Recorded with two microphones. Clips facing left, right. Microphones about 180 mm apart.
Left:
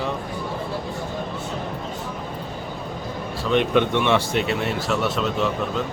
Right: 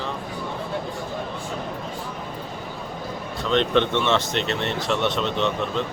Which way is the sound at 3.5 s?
10° left (ahead or behind).